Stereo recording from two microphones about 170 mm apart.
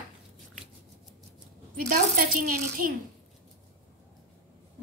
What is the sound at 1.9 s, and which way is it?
Speech, 55° right (ahead or behind).